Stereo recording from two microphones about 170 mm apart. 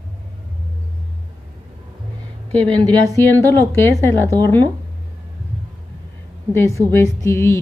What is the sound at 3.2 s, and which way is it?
Speech, 15° left (ahead or behind).